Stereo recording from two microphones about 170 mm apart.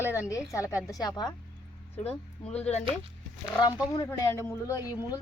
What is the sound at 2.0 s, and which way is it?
Speech, 10° left (ahead or behind).